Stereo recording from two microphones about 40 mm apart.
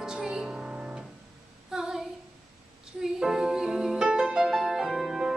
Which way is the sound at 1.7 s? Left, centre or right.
Centre.